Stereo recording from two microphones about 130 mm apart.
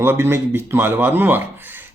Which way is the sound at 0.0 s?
15° right (ahead or behind).